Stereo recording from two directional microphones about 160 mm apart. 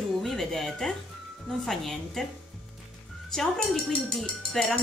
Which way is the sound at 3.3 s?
5° left (ahead or behind).